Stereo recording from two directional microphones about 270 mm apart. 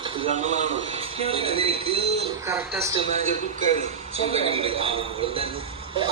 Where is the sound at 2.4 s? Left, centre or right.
Centre.